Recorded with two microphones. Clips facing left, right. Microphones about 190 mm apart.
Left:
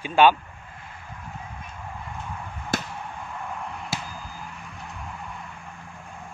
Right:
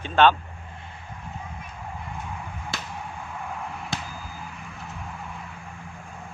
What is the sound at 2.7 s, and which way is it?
Chop, 50° left (ahead or behind).